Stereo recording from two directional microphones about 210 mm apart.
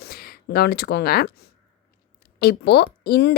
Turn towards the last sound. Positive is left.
turn(degrees=50)  # may be behind; listen again after turning